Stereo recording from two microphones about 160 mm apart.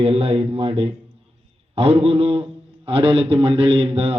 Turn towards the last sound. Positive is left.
turn(degrees=-40)  # may be behind; listen again after turning